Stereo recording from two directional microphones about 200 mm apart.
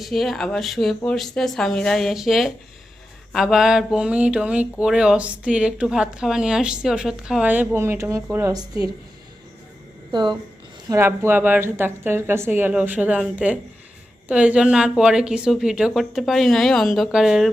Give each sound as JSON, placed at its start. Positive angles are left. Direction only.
{"t": 0.0, "sound": "speech", "side_deg": 0}
{"t": 10.1, "sound": "a woman's voice", "side_deg": -20}